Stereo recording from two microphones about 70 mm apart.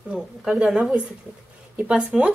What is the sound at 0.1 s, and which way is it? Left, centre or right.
Speech, centre.